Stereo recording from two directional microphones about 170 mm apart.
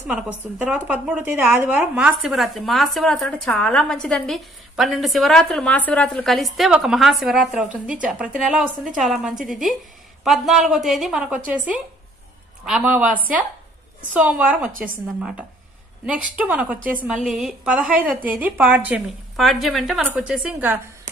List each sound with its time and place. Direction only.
0.6 s a woman's voice: 5° right (ahead or behind)